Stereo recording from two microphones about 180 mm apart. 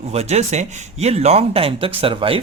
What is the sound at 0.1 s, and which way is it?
Speech, 35° right (ahead or behind).